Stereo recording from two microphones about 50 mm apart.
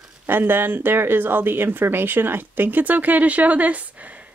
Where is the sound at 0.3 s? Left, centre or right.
Right.